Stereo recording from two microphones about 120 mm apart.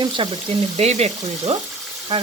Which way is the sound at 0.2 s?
50° right (ahead or behind).